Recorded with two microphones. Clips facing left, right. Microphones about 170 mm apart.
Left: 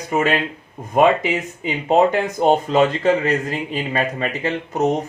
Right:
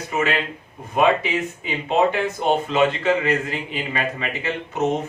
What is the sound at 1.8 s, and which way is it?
A man's voice, 40° left (ahead or behind).